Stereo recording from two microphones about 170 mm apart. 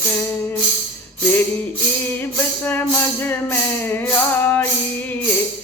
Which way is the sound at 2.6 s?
10° left (ahead or behind).